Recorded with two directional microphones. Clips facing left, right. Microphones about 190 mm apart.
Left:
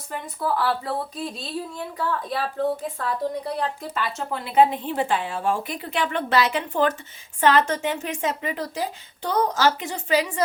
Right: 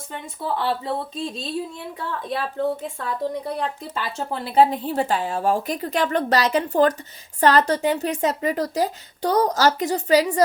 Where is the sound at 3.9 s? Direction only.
30° right (ahead or behind).